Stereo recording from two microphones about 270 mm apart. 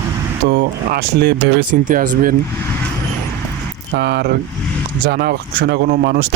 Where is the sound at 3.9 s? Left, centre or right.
Right.